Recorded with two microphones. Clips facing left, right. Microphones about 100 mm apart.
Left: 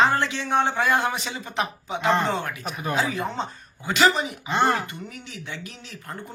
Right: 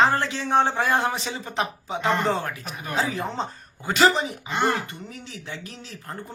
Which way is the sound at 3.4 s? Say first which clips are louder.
Right 1 dB; 40° right (ahead or behind).